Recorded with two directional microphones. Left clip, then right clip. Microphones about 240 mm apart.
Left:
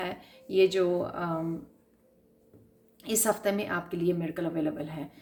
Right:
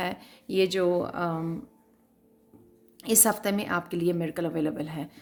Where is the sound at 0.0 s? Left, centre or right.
Right.